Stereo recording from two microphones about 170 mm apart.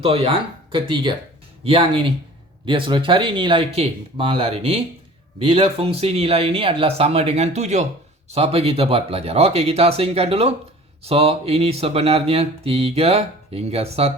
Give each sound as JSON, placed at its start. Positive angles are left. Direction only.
{"t": 0.0, "sound": "speech", "side_deg": -35}